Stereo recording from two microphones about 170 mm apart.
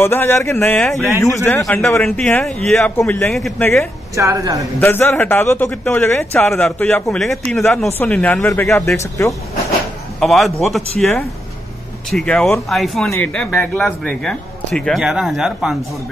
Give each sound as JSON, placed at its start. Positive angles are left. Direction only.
{"t": 0.0, "sound": "a man's voice", "side_deg": 15}
{"t": 4.1, "sound": "a woman's voice", "side_deg": -20}
{"t": 4.7, "sound": "a man's voice", "side_deg": 10}
{"t": 10.2, "sound": "speech", "side_deg": 0}